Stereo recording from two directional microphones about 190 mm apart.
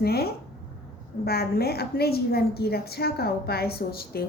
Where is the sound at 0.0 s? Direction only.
55° left (ahead or behind).